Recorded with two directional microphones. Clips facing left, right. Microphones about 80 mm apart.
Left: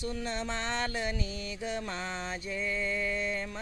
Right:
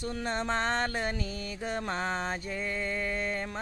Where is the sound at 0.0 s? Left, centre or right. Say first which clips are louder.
Right 2 dB; right.